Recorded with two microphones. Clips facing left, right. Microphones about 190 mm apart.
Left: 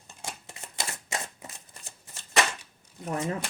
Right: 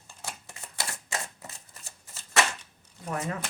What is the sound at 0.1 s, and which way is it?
Shuffling cards, 20° left (ahead or behind).